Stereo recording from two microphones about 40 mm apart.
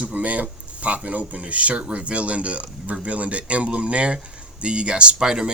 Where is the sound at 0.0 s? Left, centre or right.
Right.